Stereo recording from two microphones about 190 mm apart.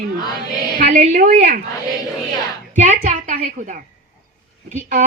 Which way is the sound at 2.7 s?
40° right (ahead or behind).